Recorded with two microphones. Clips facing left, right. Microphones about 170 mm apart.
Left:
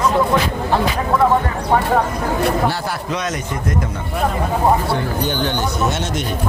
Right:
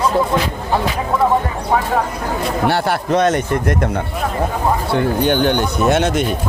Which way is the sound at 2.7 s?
65° right (ahead or behind).